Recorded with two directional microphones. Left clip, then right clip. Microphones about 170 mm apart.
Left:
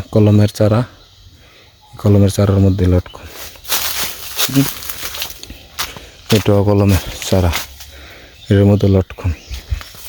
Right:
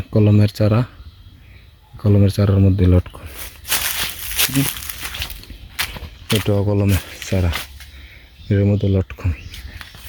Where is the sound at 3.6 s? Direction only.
20° right (ahead or behind).